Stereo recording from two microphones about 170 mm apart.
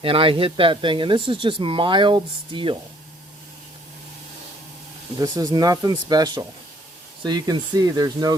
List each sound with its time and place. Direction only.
0.0 s speech: 30° right (ahead or behind)
5.1 s speech: 20° right (ahead or behind)